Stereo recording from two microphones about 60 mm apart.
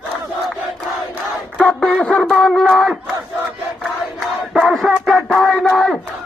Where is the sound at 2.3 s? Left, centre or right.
Centre.